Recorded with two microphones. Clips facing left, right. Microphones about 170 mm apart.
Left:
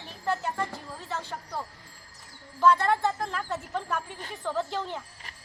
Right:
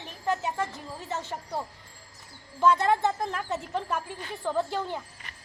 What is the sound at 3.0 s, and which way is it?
Speech, 15° right (ahead or behind).